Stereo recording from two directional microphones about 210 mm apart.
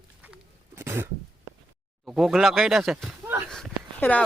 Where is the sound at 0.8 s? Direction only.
10° right (ahead or behind).